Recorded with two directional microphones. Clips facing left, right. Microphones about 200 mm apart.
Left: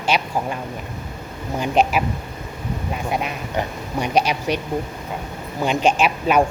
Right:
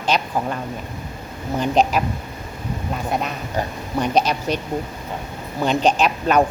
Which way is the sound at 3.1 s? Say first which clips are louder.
Even; 10° left (ahead or behind).